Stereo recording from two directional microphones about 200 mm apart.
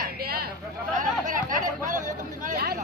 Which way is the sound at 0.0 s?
50° right (ahead or behind).